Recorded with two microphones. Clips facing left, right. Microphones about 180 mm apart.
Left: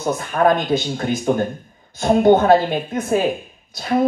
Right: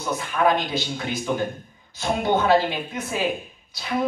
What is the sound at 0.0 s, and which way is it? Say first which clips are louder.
Speech: left 5 dB; 50° left (ahead or behind).